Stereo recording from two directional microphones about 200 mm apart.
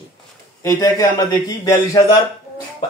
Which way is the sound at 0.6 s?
15° left (ahead or behind).